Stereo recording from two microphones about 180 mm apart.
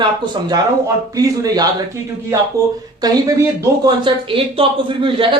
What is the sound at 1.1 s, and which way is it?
A man's voice, 20° right (ahead or behind).